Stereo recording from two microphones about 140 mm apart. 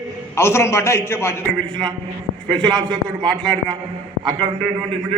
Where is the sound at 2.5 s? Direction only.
5° left (ahead or behind).